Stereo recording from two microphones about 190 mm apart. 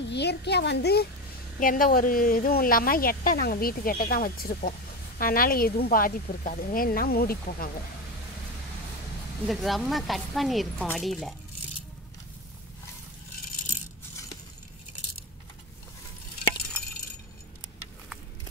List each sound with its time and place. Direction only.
0.0 s a child's voice: 65° left (ahead or behind)
1.6 s a woman's voice: 45° left (ahead or behind)
9.5 s speech: centre (ahead or behind)